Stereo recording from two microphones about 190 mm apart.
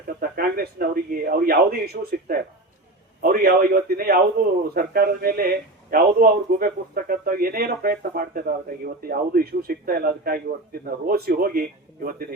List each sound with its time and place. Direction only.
0.2 s speech: 50° right (ahead or behind)